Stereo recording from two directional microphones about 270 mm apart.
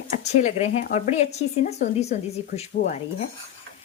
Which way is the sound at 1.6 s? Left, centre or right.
Left.